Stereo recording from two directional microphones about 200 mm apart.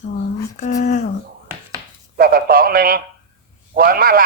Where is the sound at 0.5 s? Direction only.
35° left (ahead or behind).